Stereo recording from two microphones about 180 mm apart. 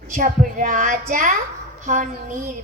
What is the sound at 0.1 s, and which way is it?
A woman's voice, 45° right (ahead or behind).